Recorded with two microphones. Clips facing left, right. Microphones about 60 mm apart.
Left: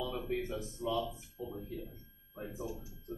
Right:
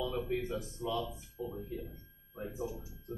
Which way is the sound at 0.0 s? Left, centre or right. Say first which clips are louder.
Right 2 dB; centre.